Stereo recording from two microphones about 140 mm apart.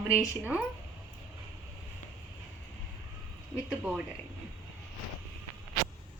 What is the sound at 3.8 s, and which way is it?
Speech, 10° right (ahead or behind).